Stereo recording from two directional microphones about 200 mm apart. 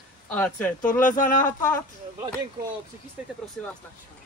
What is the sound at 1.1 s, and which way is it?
Speech, 45° left (ahead or behind).